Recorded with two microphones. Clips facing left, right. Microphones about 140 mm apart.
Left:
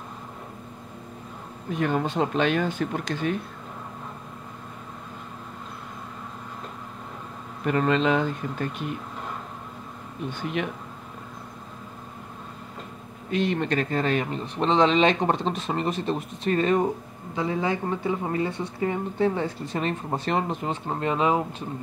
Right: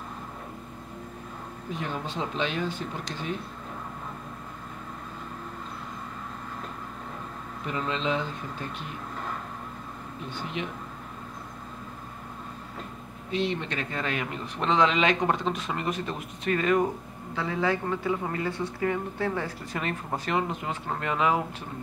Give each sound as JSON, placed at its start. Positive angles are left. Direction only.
{"t": 1.8, "sound": "speech", "side_deg": 60}
{"t": 7.6, "sound": "speech", "side_deg": 60}
{"t": 13.3, "sound": "speech", "side_deg": 50}
{"t": 17.4, "sound": "speech", "side_deg": 20}